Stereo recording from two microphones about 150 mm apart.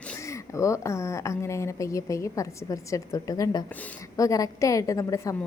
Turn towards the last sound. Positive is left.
turn(degrees=20)  # may be behind; listen again after turning